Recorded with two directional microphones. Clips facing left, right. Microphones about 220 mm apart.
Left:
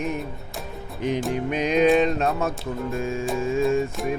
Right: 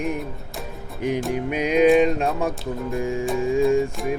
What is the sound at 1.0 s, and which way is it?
Music, 10° right (ahead or behind).